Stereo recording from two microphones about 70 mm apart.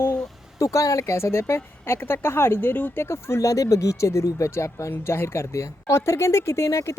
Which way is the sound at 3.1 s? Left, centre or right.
Left.